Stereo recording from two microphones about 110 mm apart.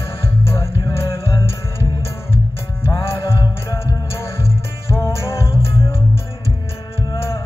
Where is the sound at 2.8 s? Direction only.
30° left (ahead or behind).